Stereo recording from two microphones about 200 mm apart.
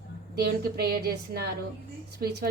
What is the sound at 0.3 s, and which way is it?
A woman's voice, 50° right (ahead or behind).